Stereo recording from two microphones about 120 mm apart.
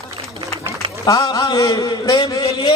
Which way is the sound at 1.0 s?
30° left (ahead or behind).